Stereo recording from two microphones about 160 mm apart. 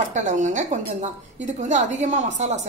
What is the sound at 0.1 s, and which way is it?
A woman's voice, 50° right (ahead or behind).